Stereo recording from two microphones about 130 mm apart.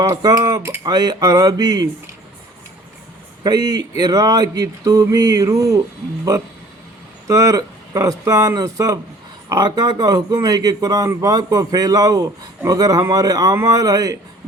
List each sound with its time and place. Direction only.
0.0 s a man's voice: 30° right (ahead or behind)
3.4 s a man's voice: 30° right (ahead or behind)
7.3 s a man's voice: 25° right (ahead or behind)